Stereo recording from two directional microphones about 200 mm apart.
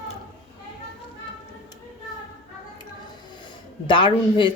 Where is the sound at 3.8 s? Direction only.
25° left (ahead or behind).